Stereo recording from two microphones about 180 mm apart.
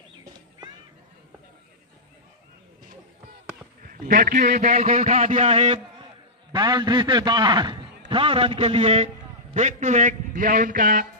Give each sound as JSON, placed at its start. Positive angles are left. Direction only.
{"t": 4.0, "sound": "a man's voice", "side_deg": -50}